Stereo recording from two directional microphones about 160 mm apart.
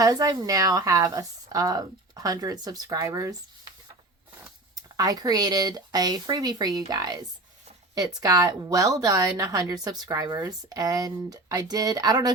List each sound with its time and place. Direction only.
0.0 s speech: 25° right (ahead or behind)
4.7 s speech: 25° right (ahead or behind)